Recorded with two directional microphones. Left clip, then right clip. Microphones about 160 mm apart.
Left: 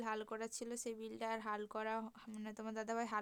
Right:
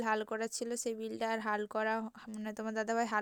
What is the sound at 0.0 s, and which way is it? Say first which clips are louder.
A woman's voice: right 9 dB; 35° right (ahead or behind).